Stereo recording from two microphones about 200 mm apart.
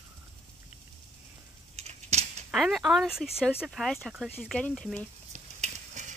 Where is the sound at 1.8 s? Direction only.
35° right (ahead or behind).